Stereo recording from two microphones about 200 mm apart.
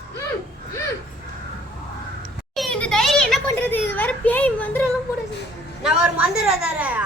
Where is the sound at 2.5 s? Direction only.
5° left (ahead or behind).